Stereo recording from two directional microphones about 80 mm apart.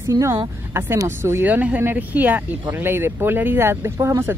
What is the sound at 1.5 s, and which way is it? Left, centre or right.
Speech, centre.